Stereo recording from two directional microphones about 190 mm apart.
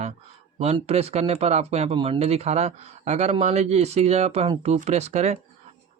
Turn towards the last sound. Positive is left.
turn(degrees=-35)  # may be behind; listen again after turning